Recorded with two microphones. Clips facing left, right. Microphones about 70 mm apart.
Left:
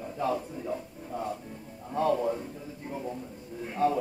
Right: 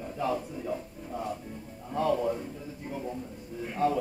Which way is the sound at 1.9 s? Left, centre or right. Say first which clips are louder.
Left 1 dB; left.